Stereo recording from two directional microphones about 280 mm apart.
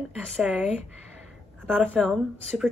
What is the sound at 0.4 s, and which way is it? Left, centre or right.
Speech, centre.